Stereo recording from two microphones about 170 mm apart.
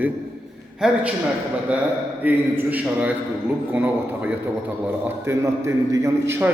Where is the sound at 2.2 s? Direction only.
10° right (ahead or behind).